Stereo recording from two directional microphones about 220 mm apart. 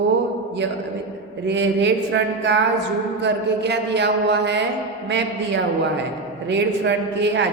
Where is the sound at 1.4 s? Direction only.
55° right (ahead or behind).